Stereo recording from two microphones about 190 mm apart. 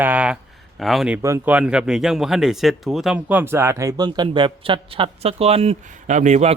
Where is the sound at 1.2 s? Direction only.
10° right (ahead or behind).